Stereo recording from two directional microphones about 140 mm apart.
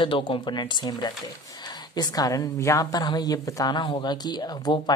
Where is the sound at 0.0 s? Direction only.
35° left (ahead or behind).